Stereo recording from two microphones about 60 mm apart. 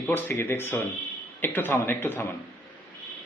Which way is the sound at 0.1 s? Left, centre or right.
Left.